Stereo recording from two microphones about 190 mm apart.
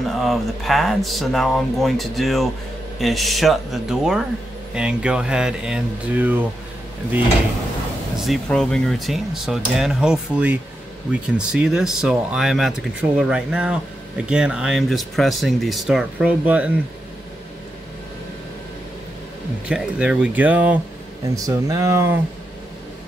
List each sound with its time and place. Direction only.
0.1 s speech: centre (ahead or behind)
8.3 s speech: 5° left (ahead or behind)
19.7 s speech: 5° right (ahead or behind)
21.5 s speech: 20° right (ahead or behind)